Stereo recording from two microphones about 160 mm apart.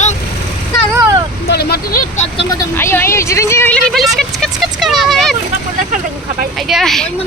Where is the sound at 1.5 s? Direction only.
90° left.